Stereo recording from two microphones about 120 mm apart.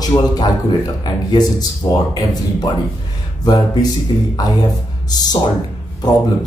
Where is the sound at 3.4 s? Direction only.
35° left (ahead or behind).